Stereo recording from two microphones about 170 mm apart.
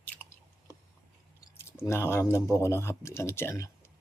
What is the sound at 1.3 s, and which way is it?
Speech, 15° left (ahead or behind).